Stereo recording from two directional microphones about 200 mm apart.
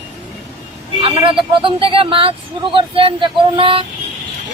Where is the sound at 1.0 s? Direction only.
25° right (ahead or behind).